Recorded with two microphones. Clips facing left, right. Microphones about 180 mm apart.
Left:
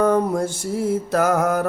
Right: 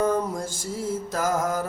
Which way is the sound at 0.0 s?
65° left (ahead or behind).